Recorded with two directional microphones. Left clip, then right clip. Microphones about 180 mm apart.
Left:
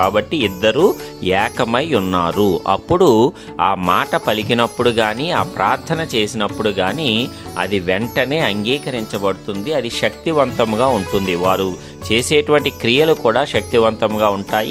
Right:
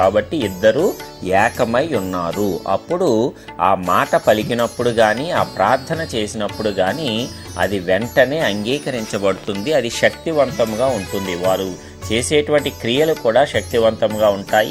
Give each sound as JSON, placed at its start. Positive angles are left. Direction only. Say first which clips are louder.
{"t": 0.0, "sound": "speech", "louder": "even", "side_deg": 15}
{"t": 10.4, "sound": "speech", "louder": "left 1 dB", "side_deg": 30}